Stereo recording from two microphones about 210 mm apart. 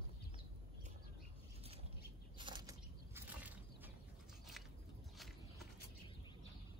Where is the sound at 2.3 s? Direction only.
20° right (ahead or behind).